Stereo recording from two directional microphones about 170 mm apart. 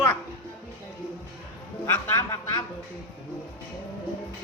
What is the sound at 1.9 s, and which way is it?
Speech, 15° left (ahead or behind).